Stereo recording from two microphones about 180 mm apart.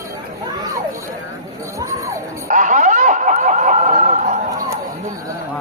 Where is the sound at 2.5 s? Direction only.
45° right (ahead or behind).